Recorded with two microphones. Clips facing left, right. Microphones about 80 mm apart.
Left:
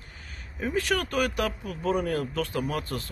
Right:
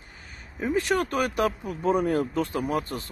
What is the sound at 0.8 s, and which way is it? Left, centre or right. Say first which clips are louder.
Speech: right 1 dB; right.